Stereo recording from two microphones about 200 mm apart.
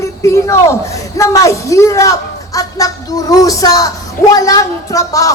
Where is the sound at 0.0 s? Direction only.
15° left (ahead or behind).